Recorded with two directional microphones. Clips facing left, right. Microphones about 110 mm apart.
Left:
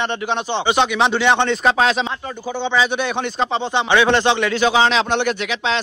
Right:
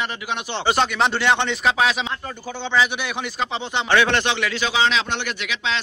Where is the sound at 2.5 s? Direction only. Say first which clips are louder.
Left 3 dB; 15° left (ahead or behind).